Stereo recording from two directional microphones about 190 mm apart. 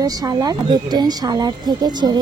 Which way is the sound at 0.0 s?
20° right (ahead or behind).